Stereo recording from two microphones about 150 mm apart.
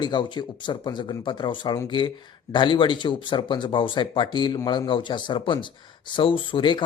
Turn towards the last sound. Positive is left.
turn(degrees=35)  # may be behind; listen again after turning